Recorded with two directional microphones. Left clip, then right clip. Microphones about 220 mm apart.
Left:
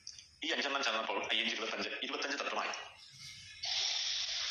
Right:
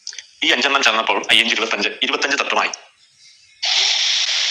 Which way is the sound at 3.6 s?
45° right (ahead or behind).